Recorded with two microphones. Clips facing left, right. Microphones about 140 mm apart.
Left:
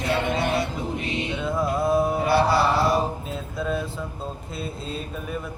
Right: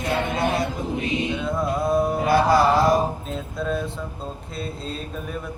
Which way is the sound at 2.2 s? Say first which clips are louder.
Right 5 dB; 45° right (ahead or behind).